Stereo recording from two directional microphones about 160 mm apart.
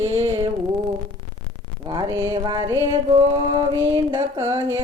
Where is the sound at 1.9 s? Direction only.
25° right (ahead or behind).